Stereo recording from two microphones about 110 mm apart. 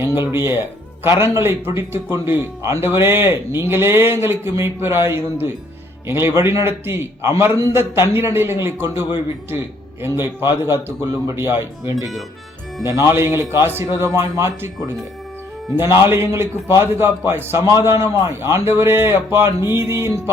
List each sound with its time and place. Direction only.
0.3 s speech: 25° right (ahead or behind)
16.0 s speech: 25° right (ahead or behind)